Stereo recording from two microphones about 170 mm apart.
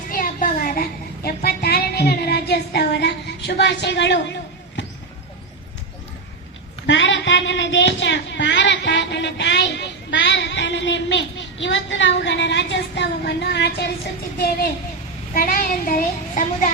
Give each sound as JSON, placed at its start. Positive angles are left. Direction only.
{"t": 0.1, "sound": "a sound", "side_deg": 55}
{"t": 6.8, "sound": "a woman's voice", "side_deg": 90}
{"t": 15.4, "sound": "a child's voice", "side_deg": 55}